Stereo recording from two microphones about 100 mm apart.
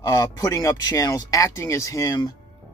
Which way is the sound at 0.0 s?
35° left (ahead or behind).